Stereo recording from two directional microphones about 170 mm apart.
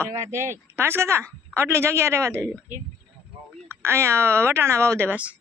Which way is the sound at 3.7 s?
15° right (ahead or behind).